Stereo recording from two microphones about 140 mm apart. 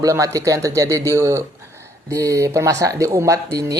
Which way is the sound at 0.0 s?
25° right (ahead or behind).